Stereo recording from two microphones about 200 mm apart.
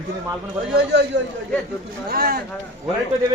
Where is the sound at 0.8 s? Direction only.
60° right (ahead or behind).